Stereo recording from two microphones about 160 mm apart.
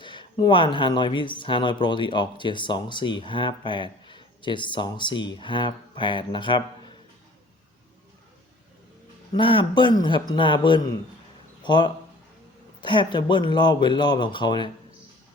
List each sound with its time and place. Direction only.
0.0 s speech: 30° left (ahead or behind)
9.3 s speech: 35° left (ahead or behind)